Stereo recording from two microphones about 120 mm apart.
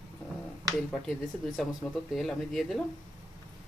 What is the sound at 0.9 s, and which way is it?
Speech, centre (ahead or behind).